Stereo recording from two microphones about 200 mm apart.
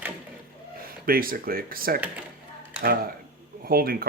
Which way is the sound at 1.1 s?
45° right (ahead or behind).